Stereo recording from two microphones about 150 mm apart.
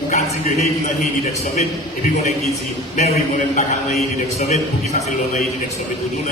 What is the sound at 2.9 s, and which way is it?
A man's voice, 50° left (ahead or behind).